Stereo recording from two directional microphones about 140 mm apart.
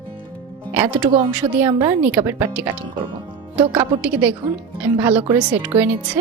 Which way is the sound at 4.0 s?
10° right (ahead or behind).